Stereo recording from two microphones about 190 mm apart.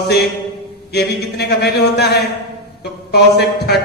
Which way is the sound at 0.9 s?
60° left (ahead or behind).